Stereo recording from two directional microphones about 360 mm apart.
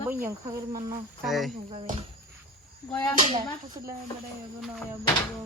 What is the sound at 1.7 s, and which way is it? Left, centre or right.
Speech, centre.